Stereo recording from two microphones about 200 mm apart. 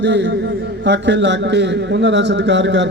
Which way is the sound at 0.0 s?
60° right (ahead or behind).